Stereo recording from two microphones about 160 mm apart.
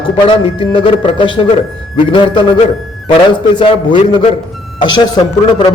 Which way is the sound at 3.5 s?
30° left (ahead or behind).